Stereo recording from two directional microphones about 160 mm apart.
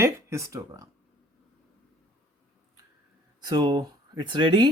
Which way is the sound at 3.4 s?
25° right (ahead or behind).